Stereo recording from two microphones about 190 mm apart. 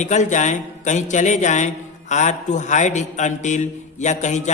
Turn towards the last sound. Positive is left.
turn(degrees=40)  # may be behind; listen again after turning